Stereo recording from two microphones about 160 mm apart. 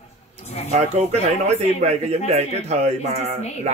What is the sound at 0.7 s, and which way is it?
A man's voice, 45° right (ahead or behind).